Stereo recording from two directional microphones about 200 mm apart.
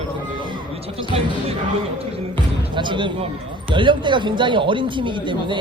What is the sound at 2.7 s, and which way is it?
Speech, 25° right (ahead or behind).